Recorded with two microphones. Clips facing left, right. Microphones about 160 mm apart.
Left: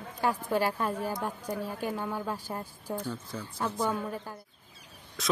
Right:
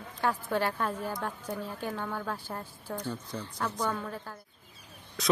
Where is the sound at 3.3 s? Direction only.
Centre (ahead or behind).